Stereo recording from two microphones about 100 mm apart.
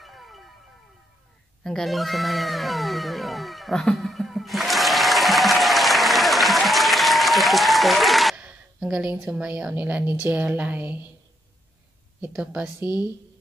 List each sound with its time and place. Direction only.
0.0 s music: centre (ahead or behind)
1.6 s music: 5° left (ahead or behind)
8.4 s a woman's voice: 10° right (ahead or behind)
12.3 s a woman's voice: 5° right (ahead or behind)